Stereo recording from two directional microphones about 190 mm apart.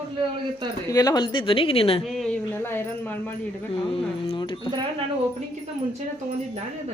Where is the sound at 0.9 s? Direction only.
20° left (ahead or behind).